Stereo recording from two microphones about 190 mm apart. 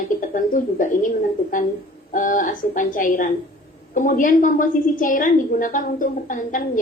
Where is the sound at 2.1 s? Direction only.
45° left (ahead or behind).